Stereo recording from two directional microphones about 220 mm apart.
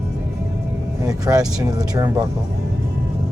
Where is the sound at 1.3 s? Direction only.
15° right (ahead or behind).